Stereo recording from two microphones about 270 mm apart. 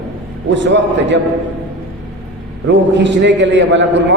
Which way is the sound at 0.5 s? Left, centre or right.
Right.